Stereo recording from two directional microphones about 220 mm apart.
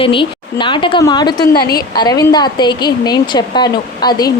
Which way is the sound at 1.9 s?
20° left (ahead or behind).